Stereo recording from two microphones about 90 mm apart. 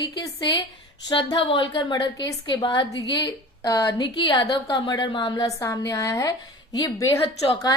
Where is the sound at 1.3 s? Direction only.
75° left (ahead or behind).